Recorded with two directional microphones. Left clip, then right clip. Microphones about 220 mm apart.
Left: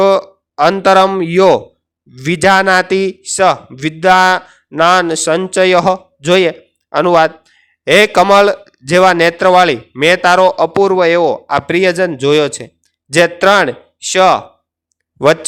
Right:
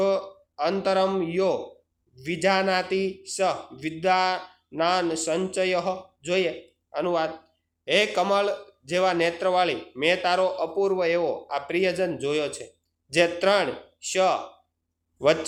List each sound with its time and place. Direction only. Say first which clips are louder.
0.0 s a man's voice: left 14 dB; 45° left (ahead or behind)